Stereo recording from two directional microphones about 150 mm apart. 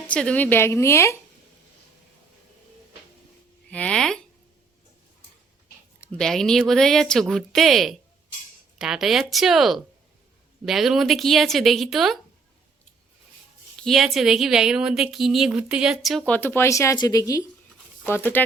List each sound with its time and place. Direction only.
0.1 s a woman's voice: 5° left (ahead or behind)
3.7 s speech: 10° left (ahead or behind)
6.0 s speech: 5° left (ahead or behind)
13.7 s speech: centre (ahead or behind)